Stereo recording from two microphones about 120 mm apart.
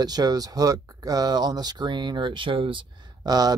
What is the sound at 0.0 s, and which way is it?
Speech, 35° right (ahead or behind).